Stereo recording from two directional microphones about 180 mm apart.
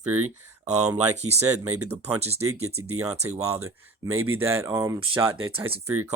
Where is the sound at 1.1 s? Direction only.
40° right (ahead or behind).